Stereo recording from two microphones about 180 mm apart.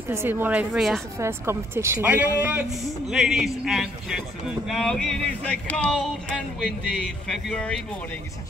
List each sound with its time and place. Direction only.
0.1 s a woman's voice: 10° right (ahead or behind)
1.2 s a man's voice: 15° right (ahead or behind); by 7.8 s 5° left (ahead or behind)